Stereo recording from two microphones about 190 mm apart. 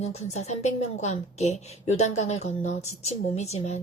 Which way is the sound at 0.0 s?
35° left (ahead or behind).